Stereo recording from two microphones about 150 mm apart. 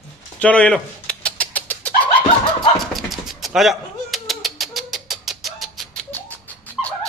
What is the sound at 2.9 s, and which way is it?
Bird, centre (ahead or behind).